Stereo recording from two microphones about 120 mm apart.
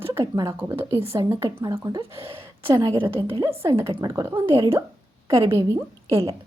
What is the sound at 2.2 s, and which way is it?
A woman's voice, 50° right (ahead or behind).